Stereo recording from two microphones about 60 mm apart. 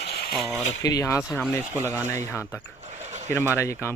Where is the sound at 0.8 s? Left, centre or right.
Left.